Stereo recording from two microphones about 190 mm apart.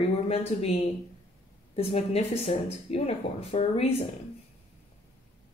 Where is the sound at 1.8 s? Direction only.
30° left (ahead or behind).